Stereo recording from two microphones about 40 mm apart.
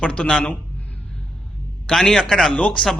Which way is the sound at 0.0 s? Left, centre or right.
Left.